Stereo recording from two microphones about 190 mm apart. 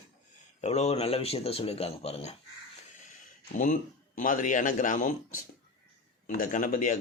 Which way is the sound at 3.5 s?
40° left (ahead or behind).